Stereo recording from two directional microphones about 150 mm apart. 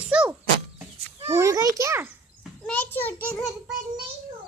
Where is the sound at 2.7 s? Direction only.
15° left (ahead or behind).